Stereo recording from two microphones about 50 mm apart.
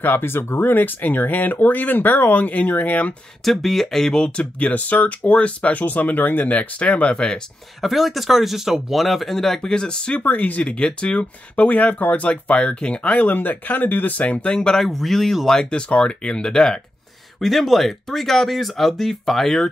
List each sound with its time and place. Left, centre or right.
0.0 s speech: left
3.4 s speech: centre
4.6 s speech: left
7.8 s speech: centre
9.6 s speech: centre
10.2 s speech: left
10.7 s speech: centre
14.8 s speech: centre
15.6 s speech: left
17.4 s speech: centre